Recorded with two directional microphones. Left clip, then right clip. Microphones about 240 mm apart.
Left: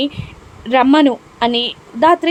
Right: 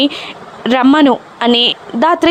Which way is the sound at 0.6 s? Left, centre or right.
Centre.